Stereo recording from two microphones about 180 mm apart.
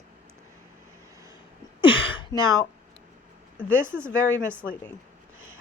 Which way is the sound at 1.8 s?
30° left (ahead or behind).